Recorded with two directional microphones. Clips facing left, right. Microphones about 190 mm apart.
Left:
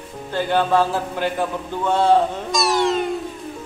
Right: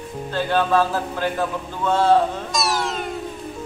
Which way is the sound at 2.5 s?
Centre (ahead or behind).